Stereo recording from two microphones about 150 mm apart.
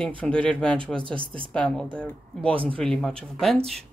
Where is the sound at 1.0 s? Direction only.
35° right (ahead or behind).